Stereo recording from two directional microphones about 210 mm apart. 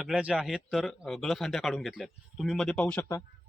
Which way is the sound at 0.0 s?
5° right (ahead or behind).